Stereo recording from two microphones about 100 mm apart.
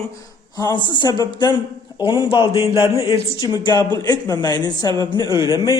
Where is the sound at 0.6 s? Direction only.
45° left (ahead or behind).